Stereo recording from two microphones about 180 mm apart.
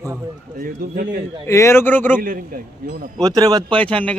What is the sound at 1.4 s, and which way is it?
Speech, 15° left (ahead or behind).